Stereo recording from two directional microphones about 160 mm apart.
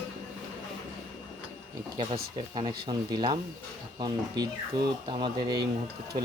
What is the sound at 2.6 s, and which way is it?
Speech, 30° right (ahead or behind).